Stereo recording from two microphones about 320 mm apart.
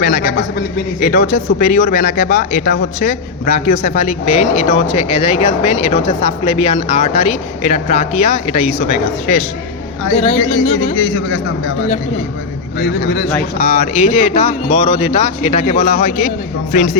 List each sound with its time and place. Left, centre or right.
0.0 s speech: left
12.8 s speech: left